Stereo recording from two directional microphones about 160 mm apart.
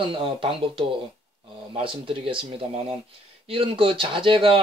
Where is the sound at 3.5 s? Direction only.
35° right (ahead or behind).